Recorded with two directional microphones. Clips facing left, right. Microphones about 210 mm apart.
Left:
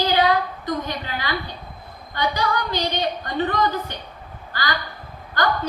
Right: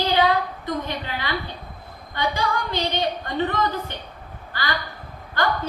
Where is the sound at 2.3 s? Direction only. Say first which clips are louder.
Left 2 dB; 25° right (ahead or behind).